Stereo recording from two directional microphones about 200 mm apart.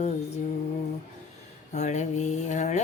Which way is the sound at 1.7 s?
35° left (ahead or behind).